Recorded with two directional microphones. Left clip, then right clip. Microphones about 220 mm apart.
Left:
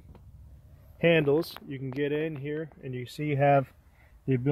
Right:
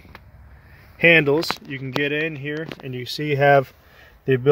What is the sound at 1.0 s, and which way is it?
Speech, centre (ahead or behind).